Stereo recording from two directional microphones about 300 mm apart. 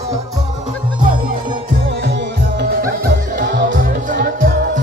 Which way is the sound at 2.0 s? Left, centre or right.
Right.